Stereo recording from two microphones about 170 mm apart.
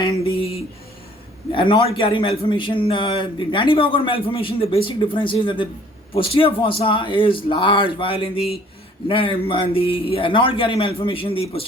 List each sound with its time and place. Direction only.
0.0 s music: 35° left (ahead or behind)
1.5 s a man's voice: 30° left (ahead or behind)